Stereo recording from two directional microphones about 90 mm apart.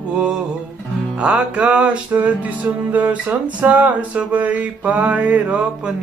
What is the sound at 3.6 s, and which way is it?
Music, 15° right (ahead or behind).